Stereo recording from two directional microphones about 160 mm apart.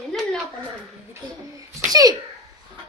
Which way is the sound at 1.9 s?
25° right (ahead or behind).